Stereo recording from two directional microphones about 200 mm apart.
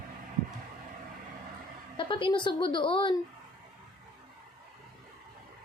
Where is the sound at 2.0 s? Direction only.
25° left (ahead or behind).